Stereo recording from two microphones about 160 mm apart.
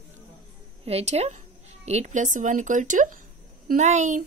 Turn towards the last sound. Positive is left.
turn(degrees=-50)  # may be behind; listen again after turning